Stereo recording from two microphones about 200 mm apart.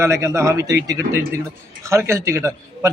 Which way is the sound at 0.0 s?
15° right (ahead or behind).